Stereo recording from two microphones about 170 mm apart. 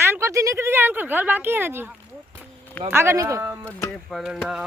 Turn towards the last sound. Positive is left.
turn(degrees=-5)  # may be behind; listen again after turning